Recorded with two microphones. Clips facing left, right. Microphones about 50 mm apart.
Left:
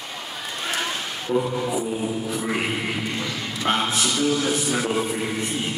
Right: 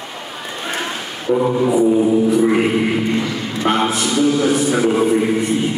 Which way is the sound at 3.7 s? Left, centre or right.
Right.